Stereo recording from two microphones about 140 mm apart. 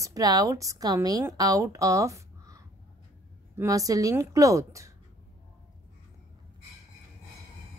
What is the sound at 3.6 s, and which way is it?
Speech, 25° right (ahead or behind).